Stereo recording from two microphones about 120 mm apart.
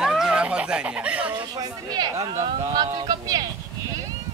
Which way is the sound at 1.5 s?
35° right (ahead or behind).